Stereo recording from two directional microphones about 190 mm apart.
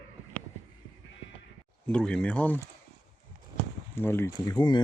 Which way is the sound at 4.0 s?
10° left (ahead or behind).